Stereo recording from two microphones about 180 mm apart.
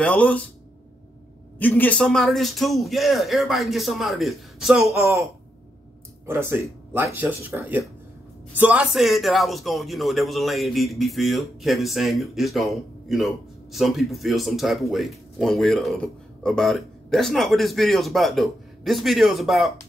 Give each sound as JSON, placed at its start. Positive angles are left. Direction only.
{"t": 0.0, "sound": "speech", "side_deg": 5}
{"t": 1.6, "sound": "speech", "side_deg": 10}
{"t": 6.2, "sound": "speech", "side_deg": -15}